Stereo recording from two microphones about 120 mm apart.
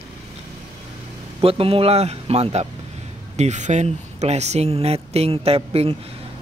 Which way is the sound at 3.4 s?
80° right.